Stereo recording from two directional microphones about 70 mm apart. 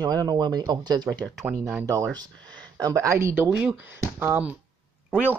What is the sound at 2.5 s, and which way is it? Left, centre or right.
Speech, right.